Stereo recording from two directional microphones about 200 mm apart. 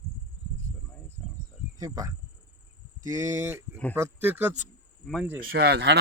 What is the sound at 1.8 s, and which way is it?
Speech, 15° right (ahead or behind).